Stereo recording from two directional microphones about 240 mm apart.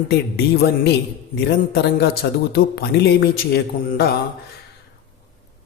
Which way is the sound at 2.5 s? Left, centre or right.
Left.